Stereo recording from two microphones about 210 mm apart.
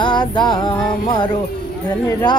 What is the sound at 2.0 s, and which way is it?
Child singing, 15° left (ahead or behind).